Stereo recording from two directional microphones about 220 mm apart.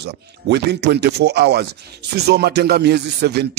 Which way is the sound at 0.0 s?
50° right (ahead or behind).